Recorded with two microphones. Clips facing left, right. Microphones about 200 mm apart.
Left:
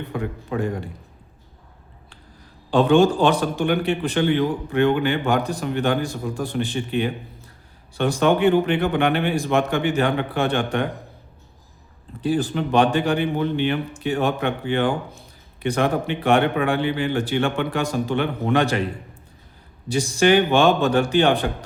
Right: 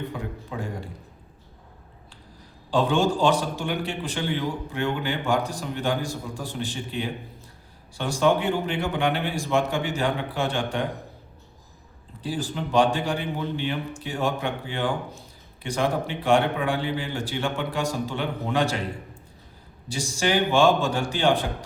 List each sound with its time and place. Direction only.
0.1 s a man's voice: 65° left (ahead or behind)
2.6 s a man's voice: 60° left (ahead or behind)
12.2 s a man's voice: 60° left (ahead or behind)
19.9 s a man's voice: 60° left (ahead or behind)